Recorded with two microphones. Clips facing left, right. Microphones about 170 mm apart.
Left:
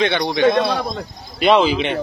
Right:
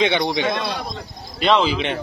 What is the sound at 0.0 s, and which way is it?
Speech, 15° right (ahead or behind).